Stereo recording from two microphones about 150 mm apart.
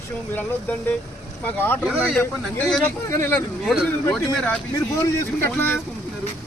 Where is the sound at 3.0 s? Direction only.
20° left (ahead or behind).